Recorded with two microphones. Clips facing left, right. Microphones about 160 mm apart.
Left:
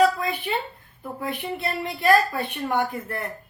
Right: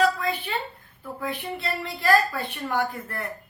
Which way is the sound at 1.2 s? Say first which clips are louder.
Left 2 dB; 20° left (ahead or behind).